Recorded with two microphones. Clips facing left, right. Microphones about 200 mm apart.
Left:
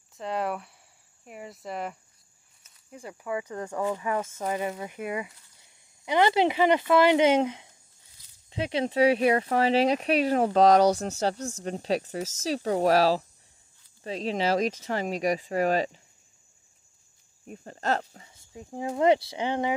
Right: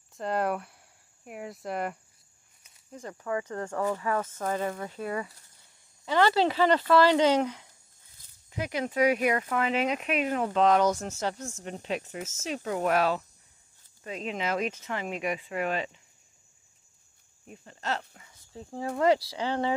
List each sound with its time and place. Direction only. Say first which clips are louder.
0.1 s speech: right 2 dB; centre (ahead or behind)
2.9 s speech: even; 10° left (ahead or behind); by 16.0 s 40° left (ahead or behind)
17.6 s speech: left 5 dB; 45° left (ahead or behind)
18.5 s speech: left 1 dB; 15° left (ahead or behind)